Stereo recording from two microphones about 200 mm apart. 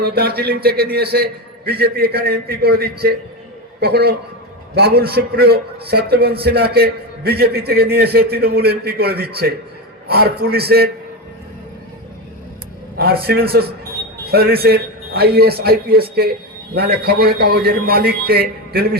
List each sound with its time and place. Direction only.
0.0 s a man's voice: 50° right (ahead or behind)
13.0 s a man's voice: 50° right (ahead or behind)